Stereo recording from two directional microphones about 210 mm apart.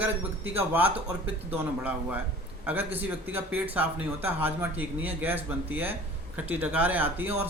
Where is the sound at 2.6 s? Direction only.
10° right (ahead or behind).